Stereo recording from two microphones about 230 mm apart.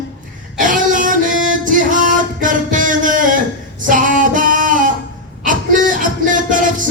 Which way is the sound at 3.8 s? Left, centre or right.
Right.